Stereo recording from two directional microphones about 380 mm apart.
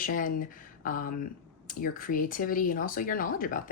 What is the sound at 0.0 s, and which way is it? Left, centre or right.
Speech, left.